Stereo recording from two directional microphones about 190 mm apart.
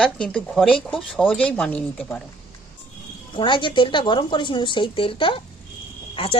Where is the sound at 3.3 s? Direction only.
25° left (ahead or behind).